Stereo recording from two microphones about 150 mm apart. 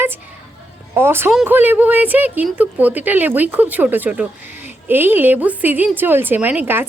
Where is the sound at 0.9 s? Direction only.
15° right (ahead or behind).